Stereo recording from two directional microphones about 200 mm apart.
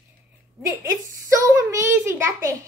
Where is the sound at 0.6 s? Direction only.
15° right (ahead or behind).